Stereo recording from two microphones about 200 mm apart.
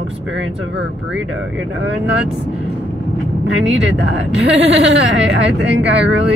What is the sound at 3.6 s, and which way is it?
Speech, 65° right (ahead or behind).